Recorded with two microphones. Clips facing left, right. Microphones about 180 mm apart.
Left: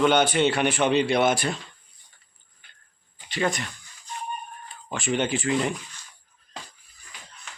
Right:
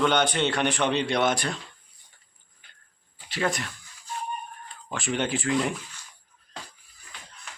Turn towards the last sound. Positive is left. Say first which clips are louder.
# left 1 dB
turn(degrees=0)  # may be behind; listen again after turning